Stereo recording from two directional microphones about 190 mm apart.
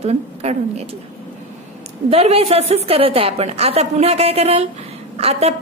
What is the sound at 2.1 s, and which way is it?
A woman's voice, 30° right (ahead or behind).